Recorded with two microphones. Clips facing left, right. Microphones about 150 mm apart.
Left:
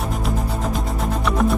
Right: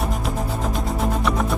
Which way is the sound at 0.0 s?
Centre (ahead or behind).